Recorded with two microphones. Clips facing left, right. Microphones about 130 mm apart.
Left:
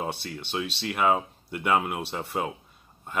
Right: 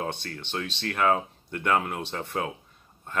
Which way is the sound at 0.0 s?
10° left (ahead or behind).